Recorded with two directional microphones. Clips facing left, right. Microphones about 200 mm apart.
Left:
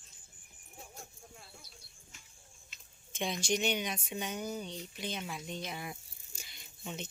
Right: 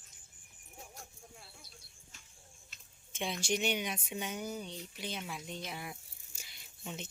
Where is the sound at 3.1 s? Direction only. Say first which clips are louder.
Left 2 dB; 5° right (ahead or behind).